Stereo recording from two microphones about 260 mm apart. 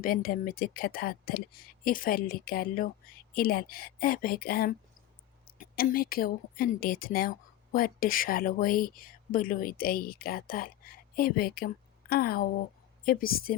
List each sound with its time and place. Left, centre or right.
0.0 s speech: left